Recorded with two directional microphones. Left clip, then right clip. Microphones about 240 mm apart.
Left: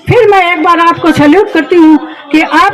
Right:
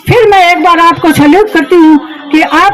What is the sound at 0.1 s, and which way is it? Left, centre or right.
A woman's voice, right.